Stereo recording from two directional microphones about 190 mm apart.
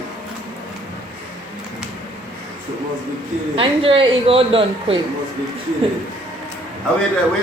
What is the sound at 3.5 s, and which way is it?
Speech, 30° right (ahead or behind).